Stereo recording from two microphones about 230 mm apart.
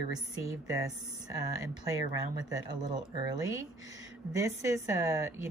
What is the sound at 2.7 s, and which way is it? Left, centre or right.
Speech, centre.